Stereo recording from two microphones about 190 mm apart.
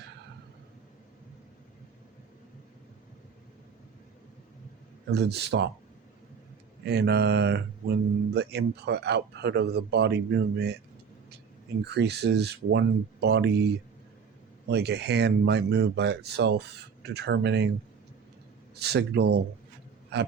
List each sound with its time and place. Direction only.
5.1 s speech: 60° right (ahead or behind)
6.8 s speech: 60° right (ahead or behind)
11.9 s speech: 60° right (ahead or behind)
14.7 s speech: 60° right (ahead or behind)
18.7 s speech: 60° right (ahead or behind)